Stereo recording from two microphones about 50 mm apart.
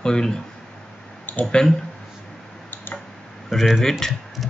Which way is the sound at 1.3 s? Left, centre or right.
Left.